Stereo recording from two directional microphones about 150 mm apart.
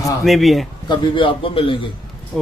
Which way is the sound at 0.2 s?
Centre (ahead or behind).